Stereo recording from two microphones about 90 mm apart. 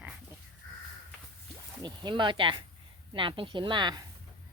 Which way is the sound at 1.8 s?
60° right (ahead or behind).